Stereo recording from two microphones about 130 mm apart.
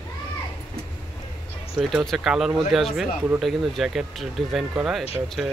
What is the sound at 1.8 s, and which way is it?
Speech, centre (ahead or behind).